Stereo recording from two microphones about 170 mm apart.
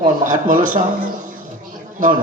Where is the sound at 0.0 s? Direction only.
50° right (ahead or behind).